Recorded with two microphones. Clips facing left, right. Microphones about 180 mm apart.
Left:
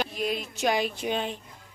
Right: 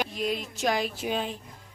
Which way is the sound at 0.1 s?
Centre (ahead or behind).